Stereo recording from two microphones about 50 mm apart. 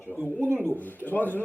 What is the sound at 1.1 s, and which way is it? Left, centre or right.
Speech, left.